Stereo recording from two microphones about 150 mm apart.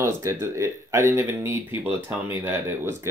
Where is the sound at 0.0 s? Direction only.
20° right (ahead or behind).